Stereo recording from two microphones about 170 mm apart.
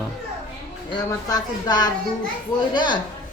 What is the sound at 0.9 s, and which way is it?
A woman's voice, 25° left (ahead or behind).